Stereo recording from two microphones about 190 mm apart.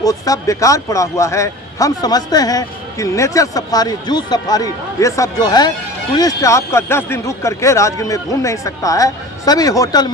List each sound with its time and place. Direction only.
0.0 s speech: 20° left (ahead or behind)